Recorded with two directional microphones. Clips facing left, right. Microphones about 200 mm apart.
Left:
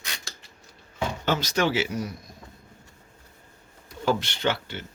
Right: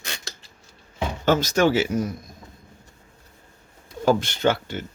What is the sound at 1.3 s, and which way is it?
Speech, 45° right (ahead or behind).